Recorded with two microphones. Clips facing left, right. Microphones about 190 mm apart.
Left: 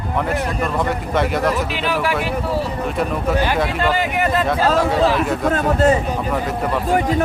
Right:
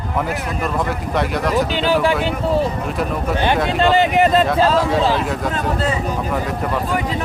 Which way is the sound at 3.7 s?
25° right (ahead or behind).